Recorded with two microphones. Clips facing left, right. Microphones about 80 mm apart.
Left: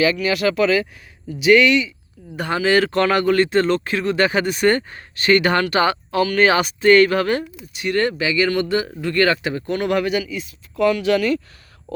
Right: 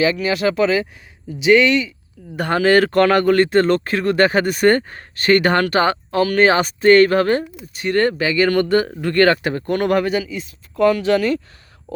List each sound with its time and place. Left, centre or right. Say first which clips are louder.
0.0 s speech: right 1 dB; right
2.3 s speech: right 3 dB; right